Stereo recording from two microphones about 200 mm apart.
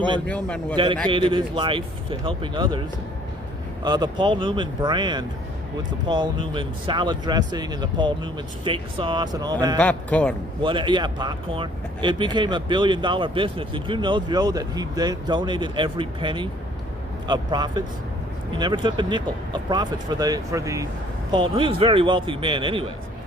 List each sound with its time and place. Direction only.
0.3 s a man's voice: 5° left (ahead or behind)
1.1 s speech: 25° right (ahead or behind)
3.8 s speech: 20° right (ahead or behind)
9.7 s a man's voice: 5° left (ahead or behind)
10.6 s speech: 25° right (ahead or behind)